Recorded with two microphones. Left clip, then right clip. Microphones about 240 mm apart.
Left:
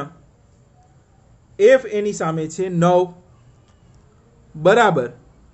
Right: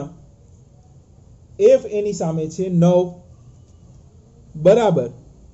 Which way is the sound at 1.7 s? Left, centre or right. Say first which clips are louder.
Left 1 dB; left.